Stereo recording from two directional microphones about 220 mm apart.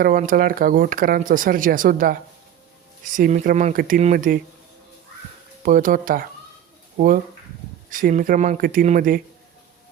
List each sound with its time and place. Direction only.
0.0 s speech: 40° right (ahead or behind)
5.6 s speech: 40° right (ahead or behind)